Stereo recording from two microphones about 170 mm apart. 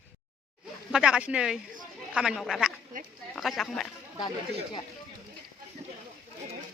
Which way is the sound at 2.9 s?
50° right (ahead or behind).